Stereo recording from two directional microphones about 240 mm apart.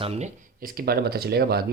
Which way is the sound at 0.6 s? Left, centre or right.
Right.